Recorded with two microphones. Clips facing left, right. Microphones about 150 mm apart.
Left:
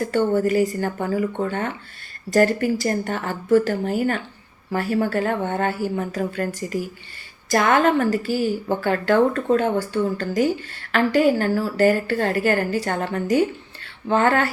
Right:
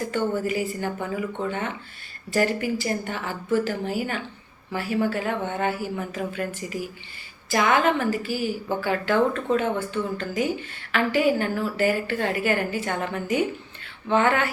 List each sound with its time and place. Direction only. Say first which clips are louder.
0.1 s a woman's voice: left 7 dB; 40° left (ahead or behind)